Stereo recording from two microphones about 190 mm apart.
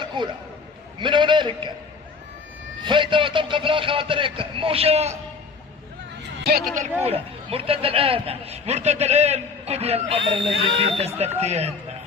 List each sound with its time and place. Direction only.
0.0 s a sound: 25° right (ahead or behind)
0.9 s a man's voice: 25° right (ahead or behind)
2.8 s a man's voice: 25° right (ahead or behind)
6.4 s speech: 55° right (ahead or behind)
6.7 s speech: 30° right (ahead or behind)